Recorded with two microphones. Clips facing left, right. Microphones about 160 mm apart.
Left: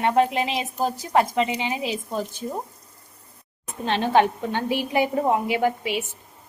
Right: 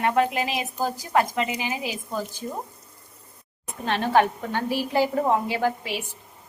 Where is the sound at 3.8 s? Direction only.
20° left (ahead or behind).